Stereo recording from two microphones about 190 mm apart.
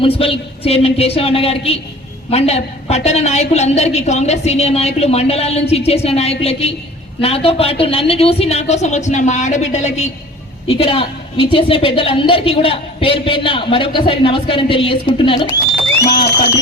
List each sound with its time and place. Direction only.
0.0 s a woman's voice: 30° left (ahead or behind)